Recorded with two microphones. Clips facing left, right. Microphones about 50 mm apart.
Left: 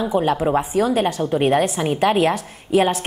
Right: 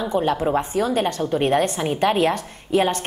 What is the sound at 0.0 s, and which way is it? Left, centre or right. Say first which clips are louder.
A woman's voice: left 2 dB; centre.